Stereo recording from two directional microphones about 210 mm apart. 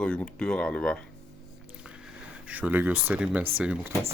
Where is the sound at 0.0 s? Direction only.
5° left (ahead or behind).